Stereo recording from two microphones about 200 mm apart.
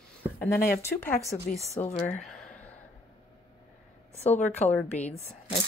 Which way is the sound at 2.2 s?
5° left (ahead or behind).